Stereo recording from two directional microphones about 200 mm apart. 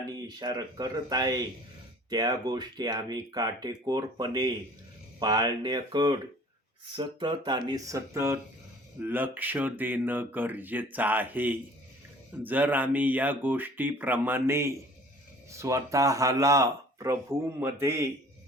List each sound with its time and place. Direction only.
0.2 s speech: 20° right (ahead or behind)